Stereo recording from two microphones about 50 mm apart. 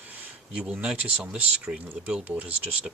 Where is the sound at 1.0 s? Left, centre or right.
Right.